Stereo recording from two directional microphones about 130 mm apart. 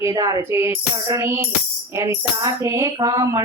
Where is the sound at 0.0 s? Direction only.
30° right (ahead or behind).